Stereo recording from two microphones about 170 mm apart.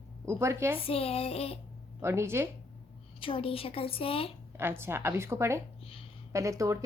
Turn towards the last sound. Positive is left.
turn(degrees=-20)  # may be behind; listen again after turning